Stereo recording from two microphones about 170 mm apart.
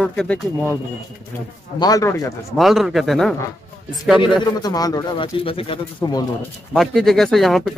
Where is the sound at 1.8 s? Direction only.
20° left (ahead or behind).